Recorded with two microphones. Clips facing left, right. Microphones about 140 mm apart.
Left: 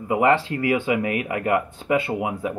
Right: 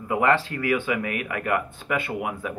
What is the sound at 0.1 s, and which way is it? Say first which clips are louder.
Speech: left 3 dB; 20° left (ahead or behind).